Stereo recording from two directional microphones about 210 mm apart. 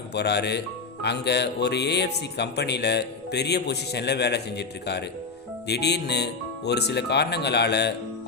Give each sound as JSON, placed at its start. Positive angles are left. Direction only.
{"t": 0.1, "sound": "speech", "side_deg": 50}